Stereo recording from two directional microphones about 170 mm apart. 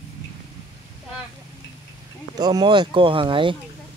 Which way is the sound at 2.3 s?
25° right (ahead or behind).